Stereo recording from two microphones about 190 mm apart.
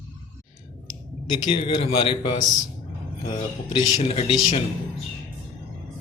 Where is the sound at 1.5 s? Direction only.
30° left (ahead or behind).